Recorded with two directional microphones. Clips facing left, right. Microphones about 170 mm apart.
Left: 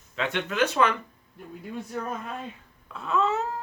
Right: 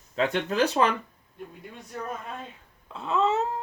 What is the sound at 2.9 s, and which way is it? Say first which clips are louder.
Dog: right 1 dB; 25° right (ahead or behind).